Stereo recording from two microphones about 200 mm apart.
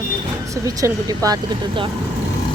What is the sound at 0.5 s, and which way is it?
Speech, 15° right (ahead or behind).